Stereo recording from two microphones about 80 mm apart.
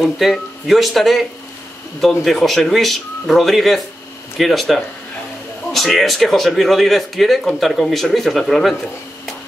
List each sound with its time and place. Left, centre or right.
0.0 s speech: centre